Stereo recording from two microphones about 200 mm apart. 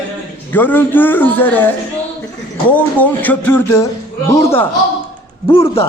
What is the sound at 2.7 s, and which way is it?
Speech, 10° left (ahead or behind).